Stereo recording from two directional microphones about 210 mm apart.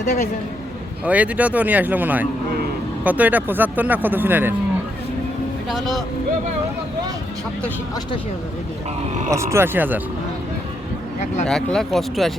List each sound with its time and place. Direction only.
0.0 s a man's voice: 45° left (ahead or behind)
1.0 s speech: 5° right (ahead or behind)
5.6 s speech: centre (ahead or behind)
9.3 s speech: 15° right (ahead or behind)
11.4 s speech: centre (ahead or behind)